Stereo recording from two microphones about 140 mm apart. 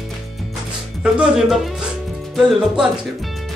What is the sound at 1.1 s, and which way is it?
Speech, centre (ahead or behind).